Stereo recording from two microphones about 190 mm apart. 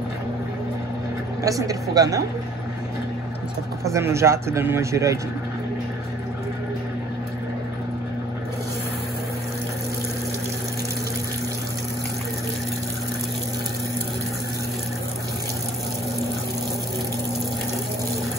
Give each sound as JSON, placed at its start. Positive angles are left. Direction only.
{"t": 1.4, "sound": "speech", "side_deg": -20}
{"t": 3.8, "sound": "speech", "side_deg": -15}